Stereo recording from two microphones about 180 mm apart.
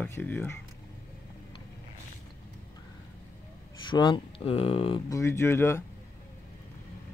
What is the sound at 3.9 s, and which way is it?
Speech, 25° left (ahead or behind).